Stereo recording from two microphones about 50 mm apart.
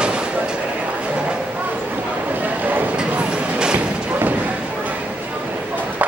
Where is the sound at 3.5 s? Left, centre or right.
Centre.